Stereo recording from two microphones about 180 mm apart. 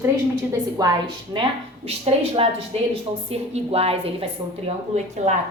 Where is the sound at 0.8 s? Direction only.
20° right (ahead or behind).